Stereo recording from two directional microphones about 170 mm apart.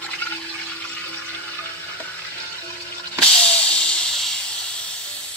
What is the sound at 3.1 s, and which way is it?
Hiss, 5° left (ahead or behind).